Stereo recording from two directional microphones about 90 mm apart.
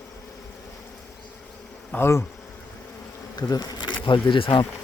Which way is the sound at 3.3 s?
45° left (ahead or behind).